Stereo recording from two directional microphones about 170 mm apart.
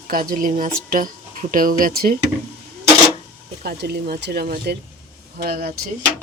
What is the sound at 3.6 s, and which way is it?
Speech, 65° right (ahead or behind).